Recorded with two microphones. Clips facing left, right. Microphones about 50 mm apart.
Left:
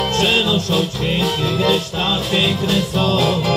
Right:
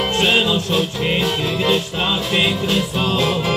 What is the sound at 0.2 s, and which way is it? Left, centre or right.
Music, centre.